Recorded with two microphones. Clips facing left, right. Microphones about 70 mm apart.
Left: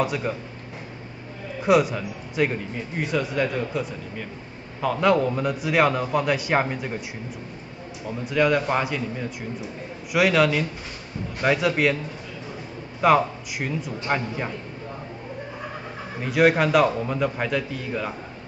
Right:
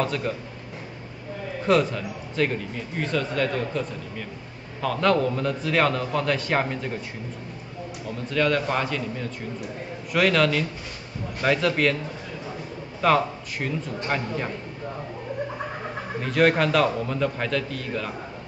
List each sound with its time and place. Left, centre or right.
0.0 s a man's voice: centre
1.6 s a man's voice: centre
8.3 s a man's voice: centre
13.0 s a man's voice: centre
16.2 s a man's voice: centre